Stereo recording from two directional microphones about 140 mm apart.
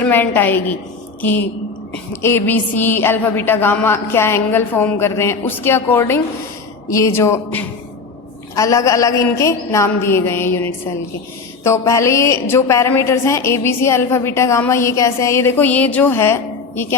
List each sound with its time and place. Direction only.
0.0 s a woman's voice: 15° left (ahead or behind)